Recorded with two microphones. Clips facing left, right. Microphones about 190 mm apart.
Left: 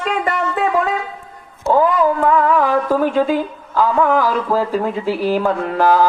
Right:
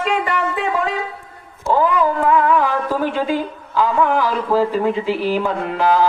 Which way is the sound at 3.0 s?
45° left (ahead or behind).